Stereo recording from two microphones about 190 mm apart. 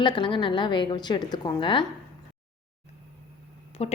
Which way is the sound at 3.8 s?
30° left (ahead or behind).